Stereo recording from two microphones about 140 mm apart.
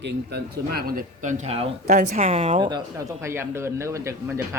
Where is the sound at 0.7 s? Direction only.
90° right; by 1.7 s 50° right (ahead or behind).